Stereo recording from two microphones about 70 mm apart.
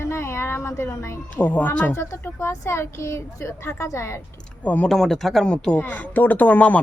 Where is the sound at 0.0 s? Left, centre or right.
Left.